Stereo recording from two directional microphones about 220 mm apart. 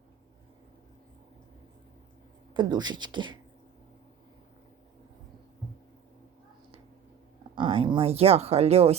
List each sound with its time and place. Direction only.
2.5 s speech: 20° right (ahead or behind)
7.5 s speech: 25° right (ahead or behind)